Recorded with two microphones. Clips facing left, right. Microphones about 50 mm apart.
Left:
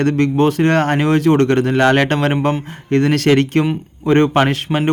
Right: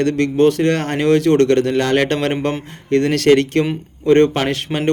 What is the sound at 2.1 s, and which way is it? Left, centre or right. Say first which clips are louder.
Speech: left 2 dB; centre.